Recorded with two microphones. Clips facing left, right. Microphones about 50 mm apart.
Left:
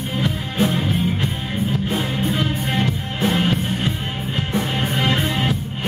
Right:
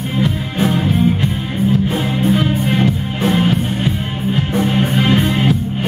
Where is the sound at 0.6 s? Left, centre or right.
Right.